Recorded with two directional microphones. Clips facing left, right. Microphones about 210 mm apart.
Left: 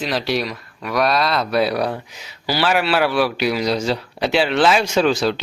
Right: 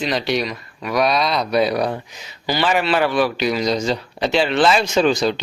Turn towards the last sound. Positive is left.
turn(degrees=5)  # may be behind; listen again after turning